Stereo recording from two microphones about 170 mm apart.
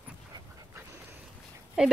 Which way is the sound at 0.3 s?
25° right (ahead or behind).